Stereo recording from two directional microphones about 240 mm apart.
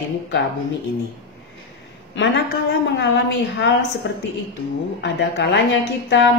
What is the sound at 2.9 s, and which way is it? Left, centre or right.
Speech, left.